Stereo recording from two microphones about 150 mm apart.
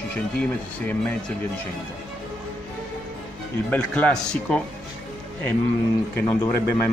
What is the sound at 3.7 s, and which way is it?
Speech, 10° left (ahead or behind).